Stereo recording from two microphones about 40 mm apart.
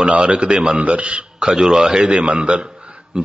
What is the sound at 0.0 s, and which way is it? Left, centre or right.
A man's voice, right.